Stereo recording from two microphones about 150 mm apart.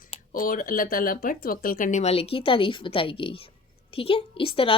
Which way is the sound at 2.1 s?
40° left (ahead or behind).